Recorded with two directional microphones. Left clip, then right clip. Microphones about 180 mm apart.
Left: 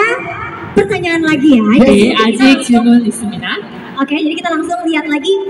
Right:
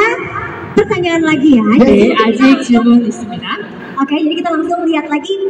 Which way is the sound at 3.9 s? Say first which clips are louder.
Right 1 dB; 5° left (ahead or behind).